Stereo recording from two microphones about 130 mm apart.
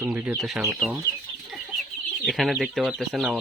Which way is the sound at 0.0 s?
15° right (ahead or behind).